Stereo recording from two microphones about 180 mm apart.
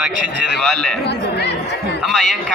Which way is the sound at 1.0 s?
70° left (ahead or behind).